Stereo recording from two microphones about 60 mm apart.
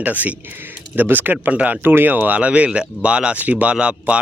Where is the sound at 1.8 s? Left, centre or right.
Right.